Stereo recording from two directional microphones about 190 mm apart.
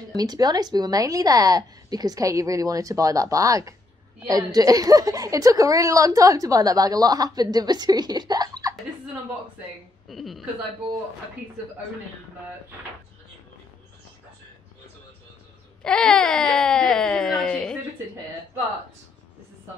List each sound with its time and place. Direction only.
0.1 s a woman's voice: 20° right (ahead or behind)
10.0 s a woman's voice: centre (ahead or behind)
15.8 s speech: 5° left (ahead or behind)